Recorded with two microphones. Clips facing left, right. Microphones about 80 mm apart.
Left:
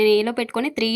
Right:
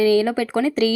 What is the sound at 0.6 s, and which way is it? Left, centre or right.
Speech, right.